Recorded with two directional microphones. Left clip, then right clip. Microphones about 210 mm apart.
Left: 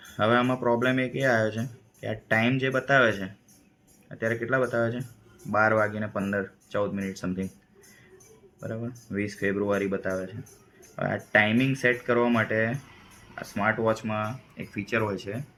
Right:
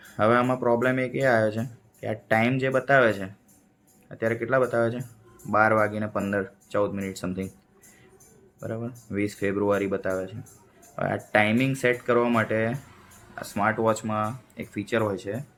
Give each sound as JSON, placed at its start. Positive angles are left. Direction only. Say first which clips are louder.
{"t": 0.2, "sound": "speech", "louder": "right 2 dB", "side_deg": -40}
{"t": 8.6, "sound": "speech", "louder": "right 2 dB", "side_deg": -40}